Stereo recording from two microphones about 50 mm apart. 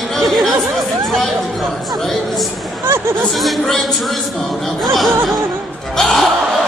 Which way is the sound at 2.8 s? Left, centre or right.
Right.